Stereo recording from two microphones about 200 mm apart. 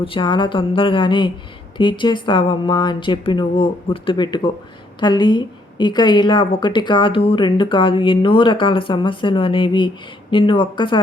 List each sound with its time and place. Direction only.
0.0 s a woman's voice: 25° left (ahead or behind)